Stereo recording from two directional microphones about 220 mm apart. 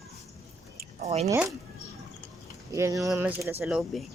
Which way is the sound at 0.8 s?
30° right (ahead or behind).